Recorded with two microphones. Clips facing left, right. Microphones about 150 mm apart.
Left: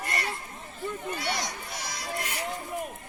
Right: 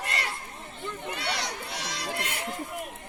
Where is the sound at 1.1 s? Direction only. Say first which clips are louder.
Left 1 dB; 70° right (ahead or behind).